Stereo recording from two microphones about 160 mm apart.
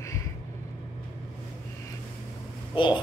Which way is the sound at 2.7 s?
30° left (ahead or behind).